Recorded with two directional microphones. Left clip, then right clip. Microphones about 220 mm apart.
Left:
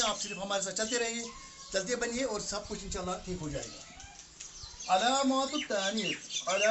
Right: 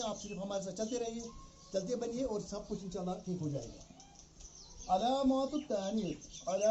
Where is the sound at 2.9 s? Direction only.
25° left (ahead or behind).